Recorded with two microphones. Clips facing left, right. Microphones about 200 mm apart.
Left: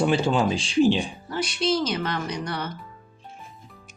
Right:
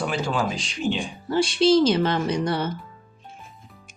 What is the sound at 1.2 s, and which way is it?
Speech, 30° right (ahead or behind).